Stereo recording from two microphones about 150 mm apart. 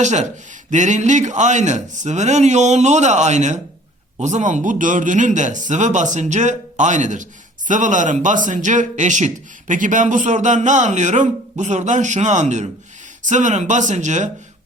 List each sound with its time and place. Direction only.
0.0 s a man's voice: 50° right (ahead or behind)